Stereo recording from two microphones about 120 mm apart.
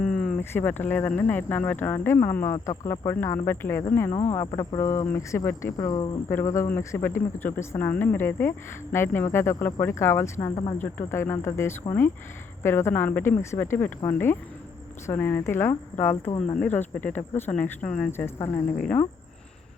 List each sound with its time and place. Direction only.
0.0 s insect: 10° left (ahead or behind)
0.3 s speech: 20° left (ahead or behind)
5.7 s speech: 35° left (ahead or behind)
6.3 s speech: 25° left (ahead or behind)
18.3 s speech: 25° left (ahead or behind)
18.8 s speech: 10° left (ahead or behind)